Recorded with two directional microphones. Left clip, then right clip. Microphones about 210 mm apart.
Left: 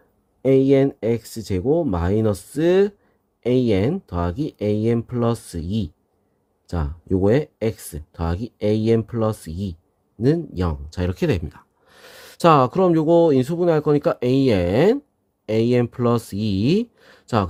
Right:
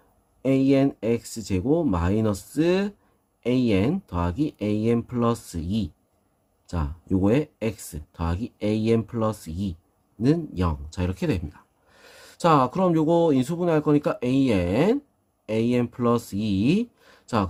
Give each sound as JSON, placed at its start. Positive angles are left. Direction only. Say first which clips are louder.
{"t": 0.4, "sound": "speech", "louder": "left 5 dB", "side_deg": 30}